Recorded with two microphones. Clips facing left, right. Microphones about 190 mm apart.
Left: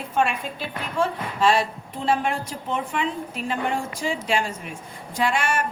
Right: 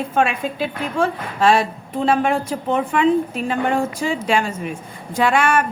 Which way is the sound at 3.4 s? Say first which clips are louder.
Right 2 dB; 55° right (ahead or behind).